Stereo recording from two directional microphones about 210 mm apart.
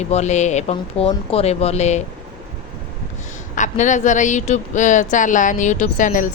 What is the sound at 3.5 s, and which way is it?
Speech, 35° left (ahead or behind).